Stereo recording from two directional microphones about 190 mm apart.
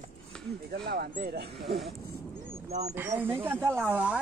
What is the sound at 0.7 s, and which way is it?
Speech, 55° right (ahead or behind).